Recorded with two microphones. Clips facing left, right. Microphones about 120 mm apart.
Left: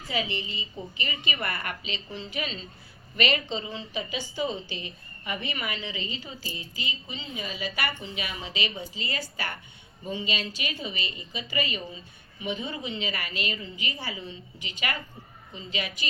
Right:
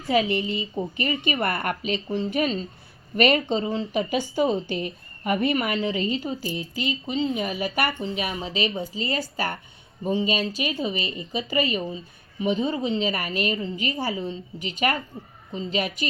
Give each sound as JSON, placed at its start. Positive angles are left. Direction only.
{"t": 0.1, "sound": "a woman's voice", "side_deg": -55}
{"t": 6.4, "sound": "speech", "side_deg": -60}
{"t": 8.4, "sound": "a woman's voice", "side_deg": -40}
{"t": 12.4, "sound": "a woman's voice", "side_deg": -30}